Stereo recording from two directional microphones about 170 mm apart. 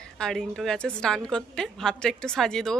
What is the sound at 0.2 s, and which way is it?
A woman's voice, 5° left (ahead or behind).